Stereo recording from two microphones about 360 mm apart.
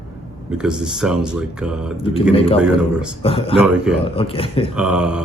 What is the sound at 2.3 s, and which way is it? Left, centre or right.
A man's voice, centre.